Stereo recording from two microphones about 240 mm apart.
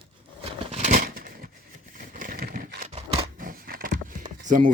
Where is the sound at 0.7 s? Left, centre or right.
Right.